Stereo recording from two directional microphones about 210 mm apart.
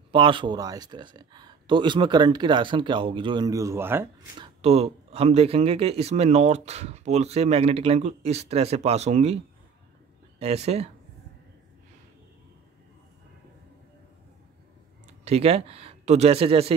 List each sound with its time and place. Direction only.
0.1 s speech: 25° right (ahead or behind)
4.4 s speech: 30° right (ahead or behind)
10.4 s speech: 30° right (ahead or behind)
15.2 s speech: 30° right (ahead or behind)